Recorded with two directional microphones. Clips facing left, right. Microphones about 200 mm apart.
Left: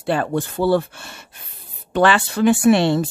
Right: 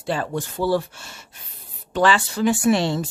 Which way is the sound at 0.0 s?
60° left (ahead or behind).